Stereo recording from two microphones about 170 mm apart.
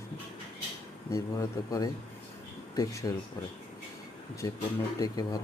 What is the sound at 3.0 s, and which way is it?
Speech, 20° left (ahead or behind).